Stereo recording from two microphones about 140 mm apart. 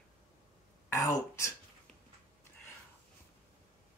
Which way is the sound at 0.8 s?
20° left (ahead or behind).